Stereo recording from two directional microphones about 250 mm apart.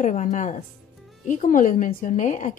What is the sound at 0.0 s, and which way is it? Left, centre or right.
A woman's voice, left.